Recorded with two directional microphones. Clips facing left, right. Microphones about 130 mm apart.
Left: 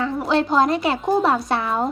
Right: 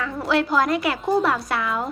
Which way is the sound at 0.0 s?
25° left (ahead or behind).